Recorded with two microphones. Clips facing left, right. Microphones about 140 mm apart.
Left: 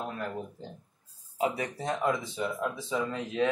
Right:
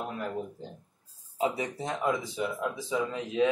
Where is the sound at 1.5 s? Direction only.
20° right (ahead or behind).